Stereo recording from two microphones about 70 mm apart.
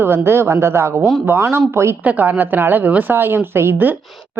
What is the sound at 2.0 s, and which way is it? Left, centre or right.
A woman's voice, right.